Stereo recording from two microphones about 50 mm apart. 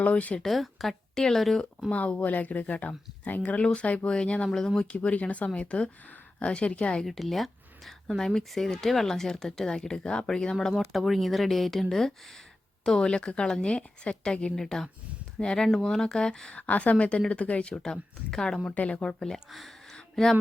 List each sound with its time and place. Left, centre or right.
0.0 s speech: left
0.3 s a woman's voice: centre
1.9 s speech: left
7.0 s speech: centre
14.5 s speech: centre
16.6 s speech: left
18.6 s speech: left
19.0 s speech: centre
19.5 s a sound: centre